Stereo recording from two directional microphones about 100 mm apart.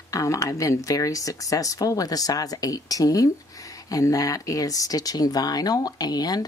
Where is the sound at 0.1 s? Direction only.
35° left (ahead or behind).